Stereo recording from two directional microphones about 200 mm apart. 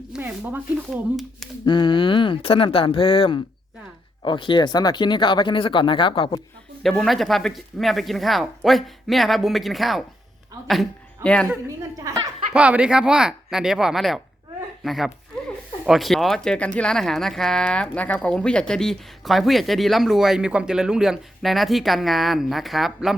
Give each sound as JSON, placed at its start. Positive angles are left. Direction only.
{"t": 0.1, "sound": "speech", "side_deg": -10}
{"t": 1.6, "sound": "speech", "side_deg": 25}
{"t": 6.8, "sound": "speech", "side_deg": 0}
{"t": 12.1, "sound": "speech", "side_deg": -15}
{"t": 12.5, "sound": "speech", "side_deg": -5}